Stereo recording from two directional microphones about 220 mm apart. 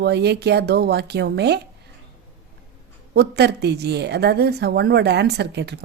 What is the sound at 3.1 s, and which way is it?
Speech, 50° right (ahead or behind).